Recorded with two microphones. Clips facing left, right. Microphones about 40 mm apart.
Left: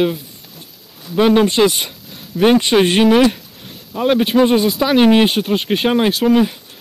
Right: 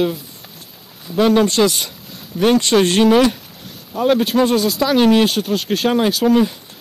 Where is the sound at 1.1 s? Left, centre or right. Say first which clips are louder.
Left 1 dB; centre.